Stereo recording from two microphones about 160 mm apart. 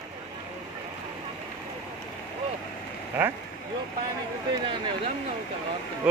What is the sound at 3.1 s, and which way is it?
Speech, 10° right (ahead or behind).